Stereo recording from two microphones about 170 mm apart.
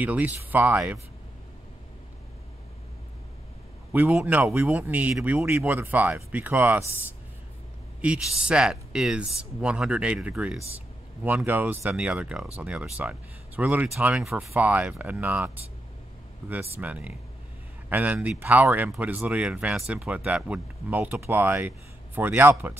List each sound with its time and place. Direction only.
0.0 s speech: 10° right (ahead or behind)
3.9 s speech: 10° right (ahead or behind)
16.7 s speech: 10° right (ahead or behind)